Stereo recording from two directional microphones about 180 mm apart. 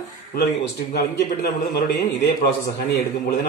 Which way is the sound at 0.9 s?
60° left (ahead or behind).